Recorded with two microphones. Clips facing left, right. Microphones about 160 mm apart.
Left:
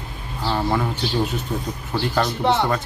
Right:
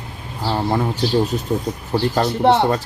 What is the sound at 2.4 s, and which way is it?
Speech, 60° right (ahead or behind).